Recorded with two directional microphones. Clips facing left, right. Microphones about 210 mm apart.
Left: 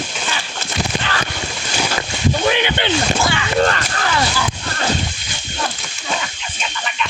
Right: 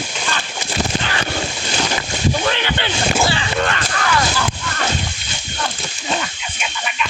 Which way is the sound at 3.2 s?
30° right (ahead or behind).